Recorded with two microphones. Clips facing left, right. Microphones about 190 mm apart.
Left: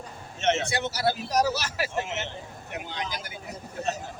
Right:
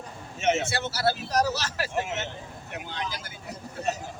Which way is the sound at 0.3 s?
10° right (ahead or behind).